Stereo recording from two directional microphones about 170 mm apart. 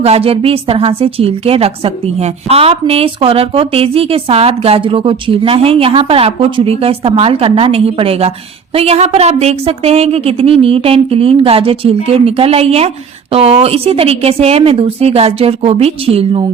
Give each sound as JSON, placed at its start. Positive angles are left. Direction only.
{"t": 0.0, "sound": "a woman's voice", "side_deg": -35}